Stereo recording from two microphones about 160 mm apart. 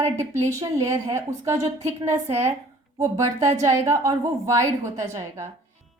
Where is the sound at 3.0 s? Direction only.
20° right (ahead or behind).